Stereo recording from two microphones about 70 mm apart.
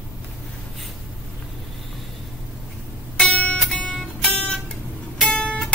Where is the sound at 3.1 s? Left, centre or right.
Centre.